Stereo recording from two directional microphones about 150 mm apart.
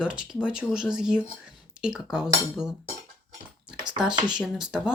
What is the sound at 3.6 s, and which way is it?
Speech, 5° right (ahead or behind).